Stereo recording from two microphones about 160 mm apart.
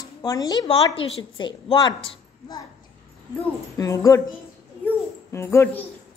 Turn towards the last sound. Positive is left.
turn(degrees=15)  # may be behind; listen again after turning